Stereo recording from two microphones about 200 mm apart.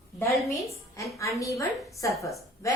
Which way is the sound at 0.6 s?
15° left (ahead or behind).